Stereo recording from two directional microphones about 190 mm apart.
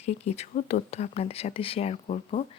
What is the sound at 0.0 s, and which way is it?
Speech, 35° left (ahead or behind).